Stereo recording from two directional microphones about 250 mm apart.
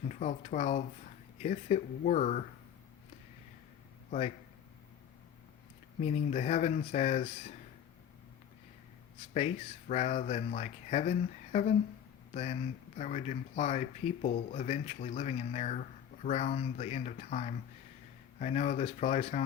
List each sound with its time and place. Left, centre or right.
0.1 s speech: left
6.0 s speech: left
9.9 s speech: left